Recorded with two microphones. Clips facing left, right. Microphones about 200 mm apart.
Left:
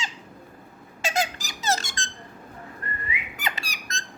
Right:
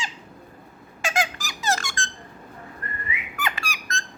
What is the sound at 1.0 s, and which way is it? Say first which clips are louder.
Squeak: even; 20° left (ahead or behind).